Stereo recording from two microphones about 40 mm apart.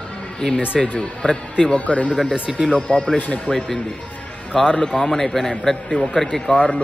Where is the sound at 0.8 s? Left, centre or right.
Left.